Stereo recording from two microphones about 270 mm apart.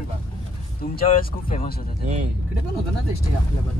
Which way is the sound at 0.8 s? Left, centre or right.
Left.